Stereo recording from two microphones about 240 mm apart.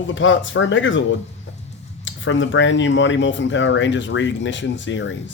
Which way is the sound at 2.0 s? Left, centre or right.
Left.